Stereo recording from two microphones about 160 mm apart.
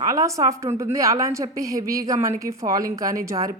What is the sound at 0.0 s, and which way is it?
A woman's voice, 20° right (ahead or behind).